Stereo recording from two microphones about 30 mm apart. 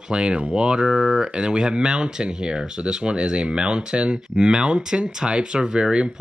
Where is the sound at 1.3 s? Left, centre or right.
Right.